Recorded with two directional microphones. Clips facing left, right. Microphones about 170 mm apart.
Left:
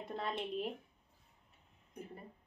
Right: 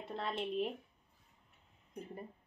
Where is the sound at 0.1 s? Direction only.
Centre (ahead or behind).